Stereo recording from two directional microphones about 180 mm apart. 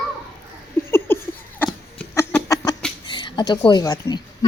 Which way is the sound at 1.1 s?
10° left (ahead or behind).